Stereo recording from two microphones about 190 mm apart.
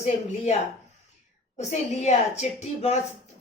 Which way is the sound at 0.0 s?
35° left (ahead or behind).